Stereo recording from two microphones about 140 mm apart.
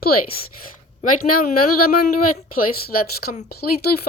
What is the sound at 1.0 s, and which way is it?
Speech, 80° left.